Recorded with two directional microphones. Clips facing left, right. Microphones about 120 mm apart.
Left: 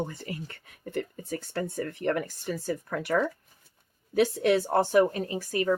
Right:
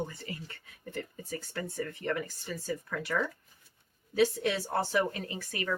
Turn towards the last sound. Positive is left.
turn(degrees=35)  # may be behind; listen again after turning